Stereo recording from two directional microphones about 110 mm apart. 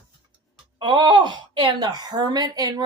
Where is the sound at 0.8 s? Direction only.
45° right (ahead or behind).